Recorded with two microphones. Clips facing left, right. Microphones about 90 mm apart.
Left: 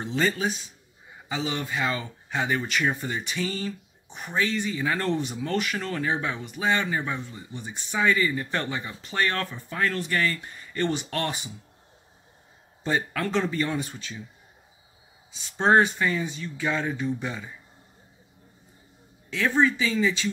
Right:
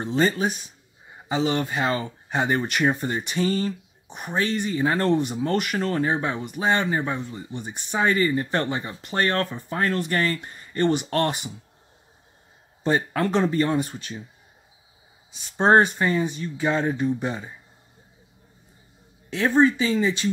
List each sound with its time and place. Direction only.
0.0 s speech: 35° right (ahead or behind)
1.3 s speech: 45° right (ahead or behind); by 7.4 s 30° right (ahead or behind)
7.5 s speech: 40° right (ahead or behind)
12.8 s speech: 35° right (ahead or behind)
13.5 s speech: 35° right (ahead or behind)
13.8 s speech: 50° right (ahead or behind)
15.5 s speech: 35° right (ahead or behind)
19.6 s speech: 35° right (ahead or behind)